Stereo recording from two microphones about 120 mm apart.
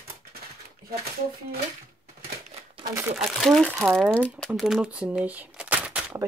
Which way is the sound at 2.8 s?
20° right (ahead or behind).